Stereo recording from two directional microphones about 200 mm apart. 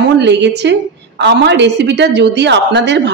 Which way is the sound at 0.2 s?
60° right (ahead or behind).